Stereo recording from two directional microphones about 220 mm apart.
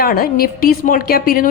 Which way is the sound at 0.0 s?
40° left (ahead or behind).